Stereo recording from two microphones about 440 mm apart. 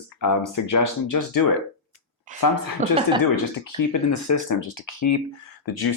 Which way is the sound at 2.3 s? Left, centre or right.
Centre.